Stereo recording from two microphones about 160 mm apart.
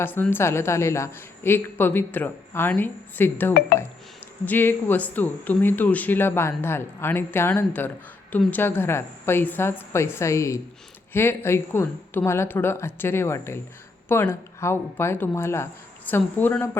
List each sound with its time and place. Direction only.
0.0 s a woman's voice: 10° left (ahead or behind)